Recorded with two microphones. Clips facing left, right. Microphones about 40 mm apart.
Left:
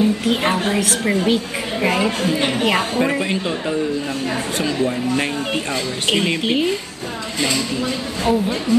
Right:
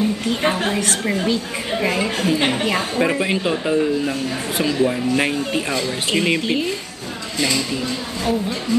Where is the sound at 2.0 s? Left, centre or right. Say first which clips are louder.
Even; centre.